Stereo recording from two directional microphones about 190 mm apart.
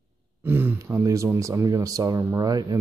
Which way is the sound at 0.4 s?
10° right (ahead or behind).